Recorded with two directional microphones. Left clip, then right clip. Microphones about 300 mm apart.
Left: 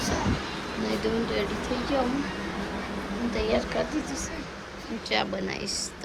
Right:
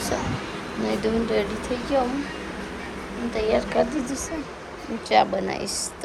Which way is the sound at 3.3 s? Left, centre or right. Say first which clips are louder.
Right 5 dB; centre.